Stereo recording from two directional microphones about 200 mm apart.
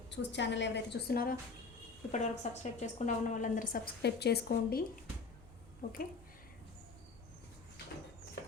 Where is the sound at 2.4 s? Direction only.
35° left (ahead or behind); by 4.8 s 50° left (ahead or behind).